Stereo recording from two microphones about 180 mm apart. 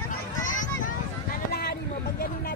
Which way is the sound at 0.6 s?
50° left (ahead or behind).